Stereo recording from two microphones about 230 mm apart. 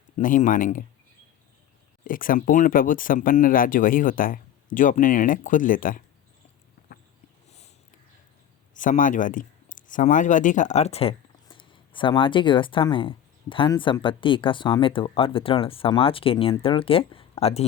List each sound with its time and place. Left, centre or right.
0.2 s speech: left
2.0 s speech: left
8.7 s speech: left